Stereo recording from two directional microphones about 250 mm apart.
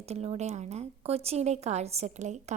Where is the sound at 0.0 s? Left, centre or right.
Right.